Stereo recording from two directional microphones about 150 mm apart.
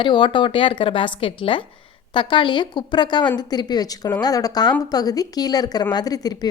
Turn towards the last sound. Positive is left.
turn(degrees=25)  # may be behind; listen again after turning